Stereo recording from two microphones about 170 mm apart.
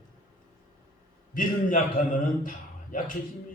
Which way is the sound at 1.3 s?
50° left (ahead or behind).